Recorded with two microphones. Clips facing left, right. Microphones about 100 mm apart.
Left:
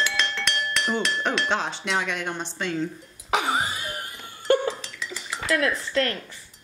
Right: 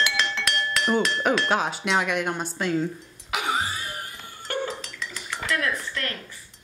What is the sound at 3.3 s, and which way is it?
Music, 30° left (ahead or behind).